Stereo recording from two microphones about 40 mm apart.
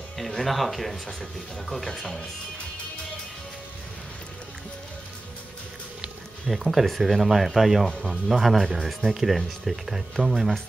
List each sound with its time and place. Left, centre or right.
0.3 s speech: centre
6.5 s speech: centre